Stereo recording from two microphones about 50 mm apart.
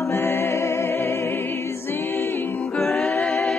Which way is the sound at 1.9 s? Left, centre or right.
Left.